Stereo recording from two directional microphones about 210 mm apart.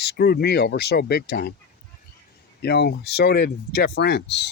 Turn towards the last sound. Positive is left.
turn(degrees=55)  # may be behind; listen again after turning